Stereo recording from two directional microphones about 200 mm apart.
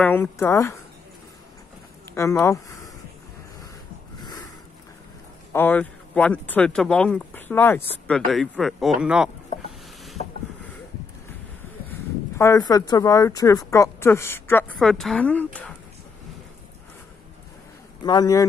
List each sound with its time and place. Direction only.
0.0 s speech: 10° left (ahead or behind)
2.1 s speech: 15° left (ahead or behind)
4.2 s sniff: 20° left (ahead or behind)
5.5 s speech: 10° left (ahead or behind)
8.3 s a sound: centre (ahead or behind)
12.4 s speech: 15° left (ahead or behind)
18.0 s speech: 20° left (ahead or behind)